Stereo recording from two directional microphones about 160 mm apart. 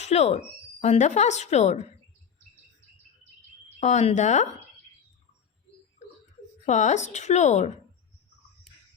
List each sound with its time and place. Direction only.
0.0 s speech: 45° left (ahead or behind)
3.8 s speech: 45° left (ahead or behind)
6.7 s speech: 50° left (ahead or behind)